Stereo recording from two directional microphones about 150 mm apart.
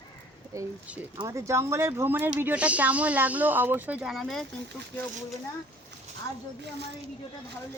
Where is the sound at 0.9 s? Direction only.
10° right (ahead or behind).